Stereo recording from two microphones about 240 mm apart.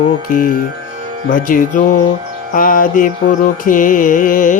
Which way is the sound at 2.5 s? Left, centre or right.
Left.